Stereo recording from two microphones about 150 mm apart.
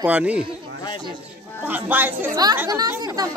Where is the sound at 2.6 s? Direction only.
25° right (ahead or behind).